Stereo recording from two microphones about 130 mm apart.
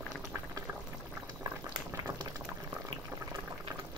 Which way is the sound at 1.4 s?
25° right (ahead or behind).